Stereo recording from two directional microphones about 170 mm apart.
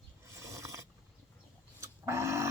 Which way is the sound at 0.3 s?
15° right (ahead or behind).